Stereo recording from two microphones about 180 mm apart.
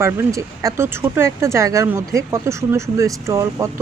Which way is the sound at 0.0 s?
15° right (ahead or behind).